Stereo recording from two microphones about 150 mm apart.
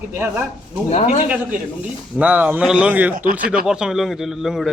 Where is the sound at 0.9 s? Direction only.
50° left (ahead or behind).